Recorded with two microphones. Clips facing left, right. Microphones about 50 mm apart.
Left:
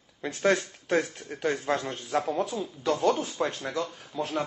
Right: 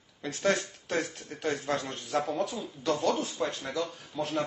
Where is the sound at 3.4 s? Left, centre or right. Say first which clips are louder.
Left 2 dB; left.